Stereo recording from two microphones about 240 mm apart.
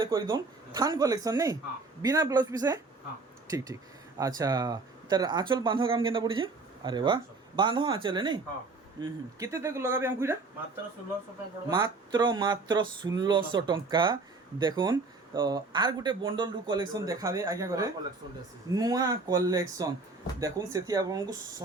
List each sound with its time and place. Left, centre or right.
0.0 s speech: centre
11.7 s speech: centre